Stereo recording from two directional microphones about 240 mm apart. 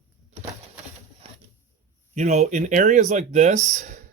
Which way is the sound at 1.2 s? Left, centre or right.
Right.